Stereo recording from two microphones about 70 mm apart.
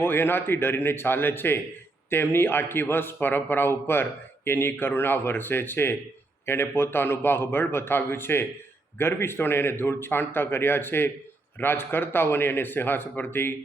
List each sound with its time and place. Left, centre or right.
0.0 s a man's voice: left